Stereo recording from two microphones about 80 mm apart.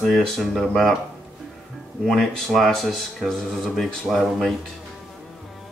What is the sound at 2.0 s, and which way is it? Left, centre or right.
Speech, centre.